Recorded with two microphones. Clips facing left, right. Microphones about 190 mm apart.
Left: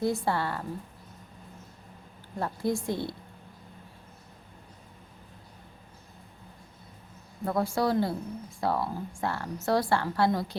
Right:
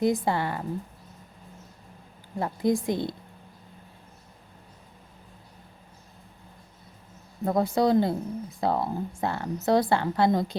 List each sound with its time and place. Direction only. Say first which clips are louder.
0.0 s a woman's voice: right 3 dB; 15° right (ahead or behind)
2.4 s a woman's voice: right 4 dB; 15° right (ahead or behind)
7.4 s speech: right 4 dB; 20° right (ahead or behind)